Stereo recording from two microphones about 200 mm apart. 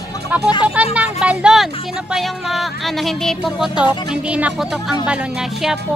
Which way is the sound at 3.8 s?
25° left (ahead or behind).